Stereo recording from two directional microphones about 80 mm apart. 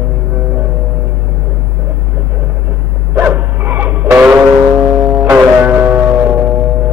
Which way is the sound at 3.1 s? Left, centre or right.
Right.